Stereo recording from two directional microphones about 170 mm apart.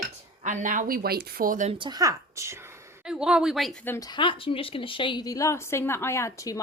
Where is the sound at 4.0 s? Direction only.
25° left (ahead or behind).